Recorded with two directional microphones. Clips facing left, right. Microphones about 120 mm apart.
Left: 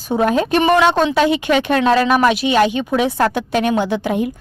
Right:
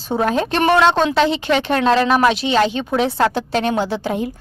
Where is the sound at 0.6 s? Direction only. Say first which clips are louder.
Even; centre (ahead or behind).